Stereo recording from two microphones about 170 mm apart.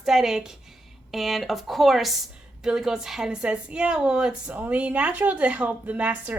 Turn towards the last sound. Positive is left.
turn(degrees=-5)  # may be behind; listen again after turning